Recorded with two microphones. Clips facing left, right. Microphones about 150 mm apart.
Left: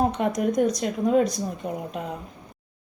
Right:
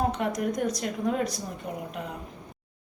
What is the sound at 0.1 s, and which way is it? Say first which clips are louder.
A woman's voice: left 4 dB; 20° left (ahead or behind).